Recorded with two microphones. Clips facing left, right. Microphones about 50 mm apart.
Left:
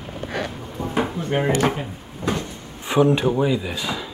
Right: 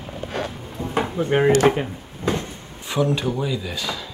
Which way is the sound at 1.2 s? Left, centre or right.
Centre.